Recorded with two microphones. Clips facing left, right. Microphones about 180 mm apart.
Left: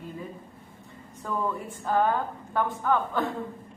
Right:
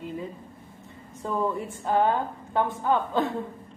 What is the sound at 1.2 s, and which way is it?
A woman's voice, 20° right (ahead or behind).